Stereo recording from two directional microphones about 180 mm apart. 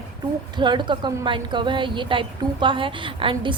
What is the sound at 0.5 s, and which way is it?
A woman's voice, 25° right (ahead or behind).